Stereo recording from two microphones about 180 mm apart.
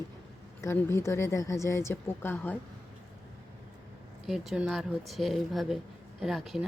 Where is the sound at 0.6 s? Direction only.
15° left (ahead or behind).